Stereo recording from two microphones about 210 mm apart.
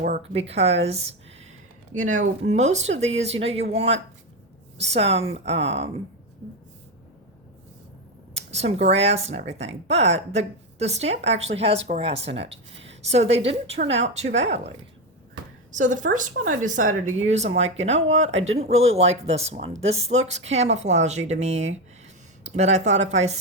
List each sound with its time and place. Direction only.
0.2 s speech: 30° right (ahead or behind)
8.3 s speech: 30° right (ahead or behind)
15.7 s speech: 35° right (ahead or behind)